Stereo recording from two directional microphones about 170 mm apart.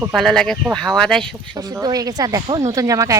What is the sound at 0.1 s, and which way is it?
Speech, centre (ahead or behind).